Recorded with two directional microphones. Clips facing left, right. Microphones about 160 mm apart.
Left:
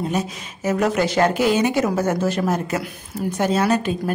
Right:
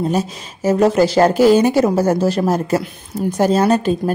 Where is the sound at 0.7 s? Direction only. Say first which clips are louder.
Right 6 dB; 30° right (ahead or behind).